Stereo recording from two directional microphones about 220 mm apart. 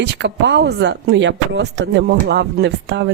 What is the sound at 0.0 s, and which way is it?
Speech, 50° right (ahead or behind).